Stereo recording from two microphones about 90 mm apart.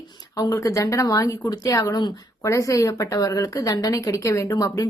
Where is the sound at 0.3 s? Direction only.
40° left (ahead or behind).